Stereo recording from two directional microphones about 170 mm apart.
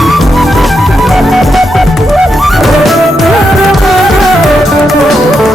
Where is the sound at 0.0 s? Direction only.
Centre (ahead or behind).